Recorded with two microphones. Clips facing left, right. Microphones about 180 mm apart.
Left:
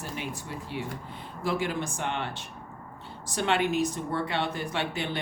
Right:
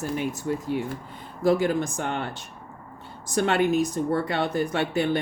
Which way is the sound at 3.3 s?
45° right (ahead or behind).